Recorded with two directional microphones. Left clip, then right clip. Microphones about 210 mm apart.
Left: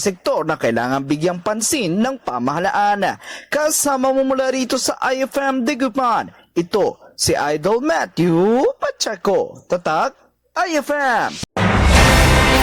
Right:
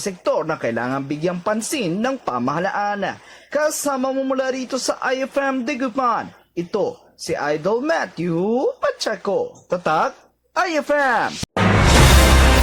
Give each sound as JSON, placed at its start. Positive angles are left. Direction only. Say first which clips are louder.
{"t": 0.0, "sound": "speech", "louder": "left 2 dB", "side_deg": 40}
{"t": 11.3, "sound": "music", "louder": "even", "side_deg": 0}